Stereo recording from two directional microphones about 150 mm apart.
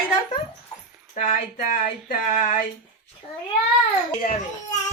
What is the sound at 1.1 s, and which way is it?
Speech, 60° left (ahead or behind).